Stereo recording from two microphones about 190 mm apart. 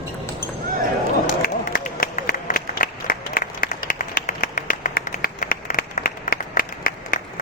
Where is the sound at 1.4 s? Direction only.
45° left (ahead or behind).